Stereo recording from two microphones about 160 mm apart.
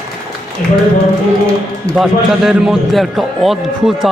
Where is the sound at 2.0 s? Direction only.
5° right (ahead or behind).